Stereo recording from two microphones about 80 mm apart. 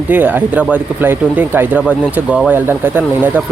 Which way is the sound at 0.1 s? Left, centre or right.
Right.